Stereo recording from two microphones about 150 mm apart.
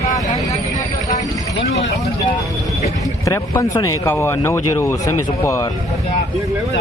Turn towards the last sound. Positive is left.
turn(degrees=20)  # may be behind; listen again after turning